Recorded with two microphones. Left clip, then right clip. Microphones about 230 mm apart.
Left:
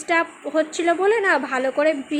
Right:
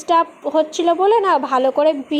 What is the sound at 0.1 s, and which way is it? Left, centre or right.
A woman's voice, centre.